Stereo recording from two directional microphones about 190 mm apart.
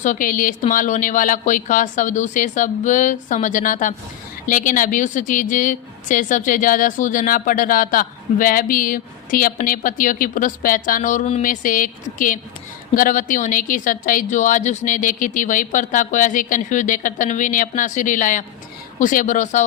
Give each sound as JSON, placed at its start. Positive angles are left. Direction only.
{"t": 0.0, "sound": "speech", "side_deg": 45}